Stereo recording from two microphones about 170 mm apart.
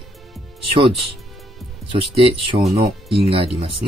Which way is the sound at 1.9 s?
35° right (ahead or behind).